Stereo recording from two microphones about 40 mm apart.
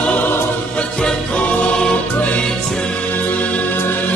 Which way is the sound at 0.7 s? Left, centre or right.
Left.